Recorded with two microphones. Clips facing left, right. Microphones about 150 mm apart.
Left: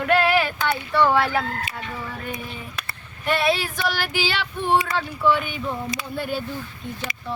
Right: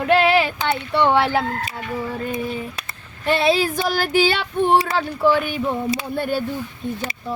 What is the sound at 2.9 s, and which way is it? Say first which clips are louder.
Speech: right 3 dB; 30° right (ahead or behind).